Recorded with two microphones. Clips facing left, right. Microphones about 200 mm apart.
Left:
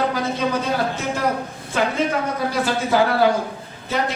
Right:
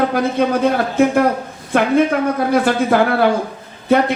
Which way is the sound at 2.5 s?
55° right (ahead or behind).